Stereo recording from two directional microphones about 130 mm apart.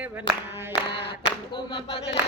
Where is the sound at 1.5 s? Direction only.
40° left (ahead or behind).